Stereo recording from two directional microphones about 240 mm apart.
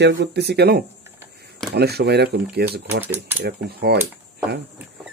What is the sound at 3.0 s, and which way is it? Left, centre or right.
Speech, centre.